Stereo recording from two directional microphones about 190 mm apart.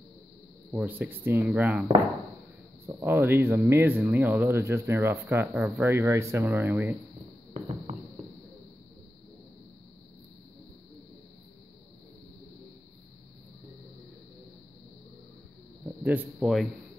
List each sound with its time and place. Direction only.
0.7 s speech: 10° right (ahead or behind)
2.9 s speech: 10° right (ahead or behind)
7.5 s a sound: 35° right (ahead or behind)
16.0 s speech: 10° right (ahead or behind)